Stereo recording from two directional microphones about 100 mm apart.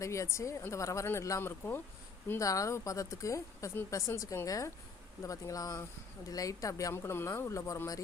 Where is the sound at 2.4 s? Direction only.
35° left (ahead or behind).